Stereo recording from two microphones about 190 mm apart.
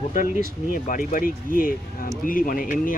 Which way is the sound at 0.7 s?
45° left (ahead or behind).